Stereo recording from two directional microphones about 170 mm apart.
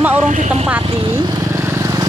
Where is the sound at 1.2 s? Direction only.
20° right (ahead or behind).